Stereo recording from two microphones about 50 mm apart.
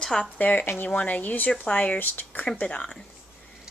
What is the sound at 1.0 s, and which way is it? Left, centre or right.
Speech, left.